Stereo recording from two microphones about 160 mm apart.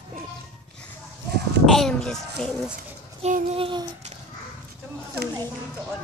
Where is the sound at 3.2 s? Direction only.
40° right (ahead or behind).